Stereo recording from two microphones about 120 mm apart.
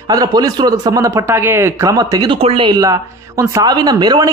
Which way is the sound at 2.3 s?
50° right (ahead or behind).